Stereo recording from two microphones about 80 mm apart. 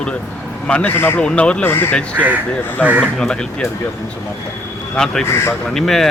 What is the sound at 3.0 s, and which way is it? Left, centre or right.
Speech, centre.